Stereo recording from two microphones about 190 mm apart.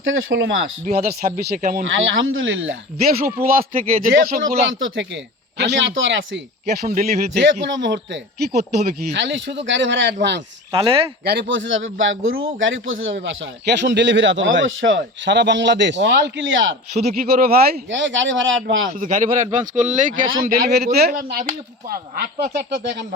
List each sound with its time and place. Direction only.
0.0 s a man's voice: 80° right
0.9 s speech: 50° right (ahead or behind)
1.9 s speech: 90° right
3.0 s speech: 50° right (ahead or behind)
4.8 s speech: 70° right (ahead or behind)
6.8 s speech: 45° right (ahead or behind)
9.1 s speech: 70° right (ahead or behind)
10.7 s speech: 25° right (ahead or behind)
11.2 s a man's voice: 60° right (ahead or behind)
17.2 s speech: 50° right (ahead or behind)
17.8 s a man's voice: 80° right
18.9 s a man's voice: 40° right (ahead or behind)